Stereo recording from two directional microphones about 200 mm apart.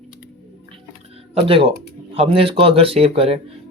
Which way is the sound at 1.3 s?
30° right (ahead or behind).